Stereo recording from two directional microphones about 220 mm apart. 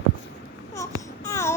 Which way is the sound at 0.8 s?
15° left (ahead or behind).